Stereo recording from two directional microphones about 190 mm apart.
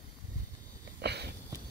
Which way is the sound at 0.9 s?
60° right (ahead or behind).